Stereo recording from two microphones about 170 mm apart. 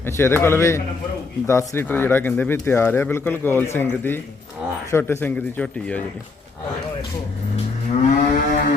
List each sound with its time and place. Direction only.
0.0 s speech: 15° left (ahead or behind)
8.1 s moo: 50° left (ahead or behind)